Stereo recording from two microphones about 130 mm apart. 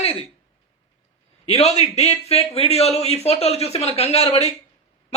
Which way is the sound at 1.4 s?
55° left (ahead or behind).